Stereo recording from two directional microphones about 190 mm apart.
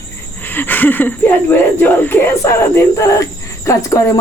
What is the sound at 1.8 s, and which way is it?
Speech, 10° left (ahead or behind).